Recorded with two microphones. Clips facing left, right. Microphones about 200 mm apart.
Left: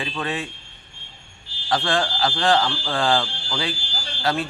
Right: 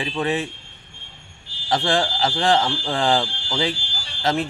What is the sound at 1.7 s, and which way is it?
Speech, 20° right (ahead or behind).